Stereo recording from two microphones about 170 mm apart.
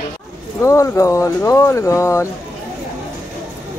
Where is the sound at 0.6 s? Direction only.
15° left (ahead or behind).